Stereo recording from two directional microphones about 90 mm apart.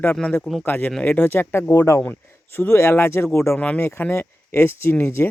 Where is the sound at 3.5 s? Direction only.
15° left (ahead or behind).